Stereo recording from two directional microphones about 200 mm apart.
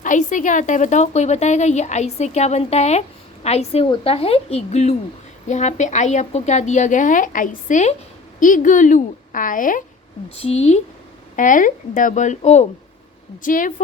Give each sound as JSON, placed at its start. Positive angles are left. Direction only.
{"t": 0.0, "sound": "a woman's voice", "side_deg": 40}
{"t": 10.3, "sound": "a woman's voice", "side_deg": 30}